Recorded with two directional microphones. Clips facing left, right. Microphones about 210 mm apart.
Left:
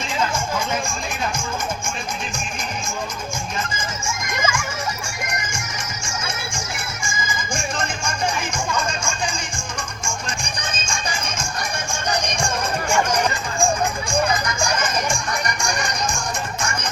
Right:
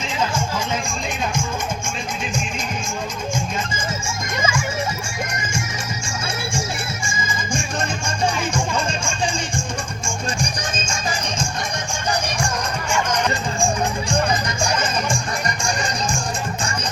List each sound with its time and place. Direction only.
4.0 s music: 30° right (ahead or behind)
6.1 s music: 30° right (ahead or behind)
10.7 s music: 40° right (ahead or behind)
12.9 s music: 10° left (ahead or behind)
14.3 s music: 30° right (ahead or behind)